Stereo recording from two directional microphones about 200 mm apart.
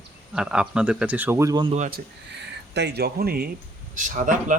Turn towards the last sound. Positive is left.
turn(degrees=-40)  # may be behind; listen again after turning